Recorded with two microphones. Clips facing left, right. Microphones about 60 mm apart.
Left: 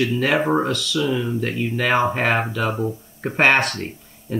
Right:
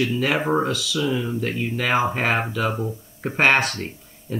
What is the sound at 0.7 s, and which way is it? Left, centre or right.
Speech, centre.